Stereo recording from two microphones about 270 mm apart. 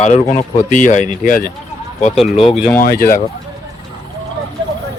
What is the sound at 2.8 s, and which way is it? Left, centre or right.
Speech, left.